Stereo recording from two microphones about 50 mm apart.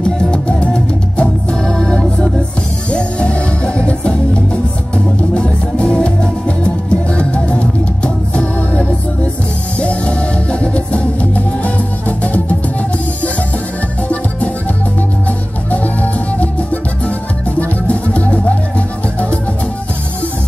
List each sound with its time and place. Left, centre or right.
0.3 s music: left
15.2 s music: left